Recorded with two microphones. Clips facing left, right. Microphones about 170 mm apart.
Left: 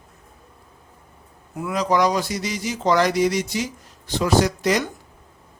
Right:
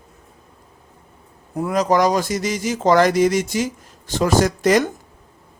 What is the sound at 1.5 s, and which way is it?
Speech, 40° right (ahead or behind).